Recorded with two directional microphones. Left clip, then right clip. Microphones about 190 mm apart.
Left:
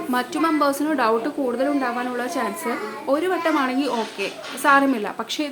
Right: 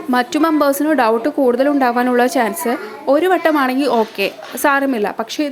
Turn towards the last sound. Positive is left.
turn(degrees=-30)  # may be behind; listen again after turning